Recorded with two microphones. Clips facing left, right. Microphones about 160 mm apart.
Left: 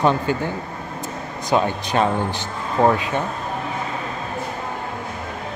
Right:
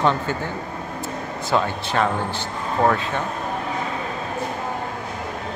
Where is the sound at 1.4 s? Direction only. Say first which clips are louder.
Left 3 dB; 15° left (ahead or behind).